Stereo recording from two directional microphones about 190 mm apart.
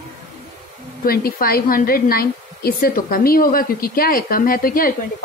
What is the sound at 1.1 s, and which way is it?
A woman's voice, 50° left (ahead or behind).